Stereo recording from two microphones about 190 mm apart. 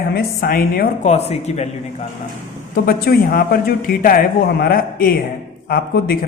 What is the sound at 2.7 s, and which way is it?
A man's voice, 50° left (ahead or behind).